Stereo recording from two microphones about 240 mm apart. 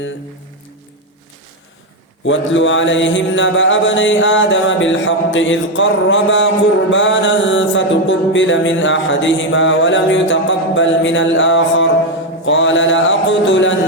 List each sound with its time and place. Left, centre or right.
2.2 s mantra: left